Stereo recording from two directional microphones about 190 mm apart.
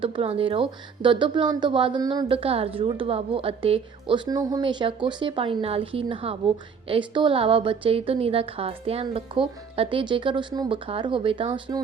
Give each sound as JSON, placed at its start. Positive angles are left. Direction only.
{"t": 0.0, "sound": "a woman's voice", "side_deg": -30}